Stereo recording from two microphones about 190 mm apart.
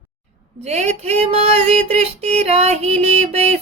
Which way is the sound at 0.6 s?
35° right (ahead or behind).